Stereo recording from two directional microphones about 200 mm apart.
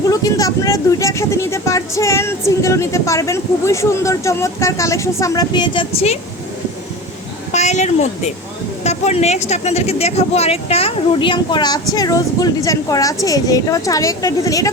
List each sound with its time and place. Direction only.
0.1 s speech: 15° left (ahead or behind)
7.5 s speech: 35° left (ahead or behind); by 14.7 s 15° left (ahead or behind)